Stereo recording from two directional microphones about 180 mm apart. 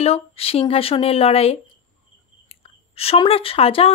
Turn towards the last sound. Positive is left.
turn(degrees=30)  # may be behind; listen again after turning